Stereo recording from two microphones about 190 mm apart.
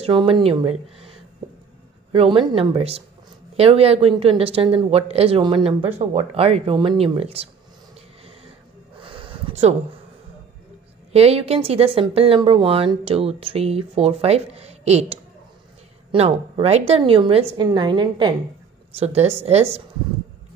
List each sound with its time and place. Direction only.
0.0 s speech: 25° right (ahead or behind)
2.1 s speech: 25° right (ahead or behind)
9.0 s a sound: 30° right (ahead or behind)
11.1 s speech: 30° right (ahead or behind)